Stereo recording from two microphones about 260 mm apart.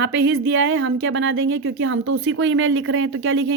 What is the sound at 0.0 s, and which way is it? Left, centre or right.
A woman's voice, right.